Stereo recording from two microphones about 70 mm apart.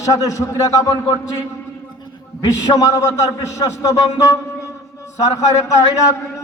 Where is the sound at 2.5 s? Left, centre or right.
Left.